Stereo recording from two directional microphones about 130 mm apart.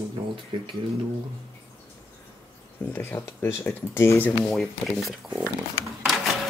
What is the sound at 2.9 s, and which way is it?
Speech, 20° left (ahead or behind).